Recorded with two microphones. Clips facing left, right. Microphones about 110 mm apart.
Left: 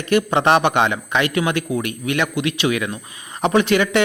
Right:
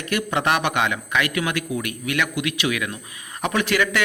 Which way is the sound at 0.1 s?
25° left (ahead or behind).